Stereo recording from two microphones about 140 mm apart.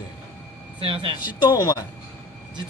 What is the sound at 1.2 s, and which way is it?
Speech, 30° left (ahead or behind).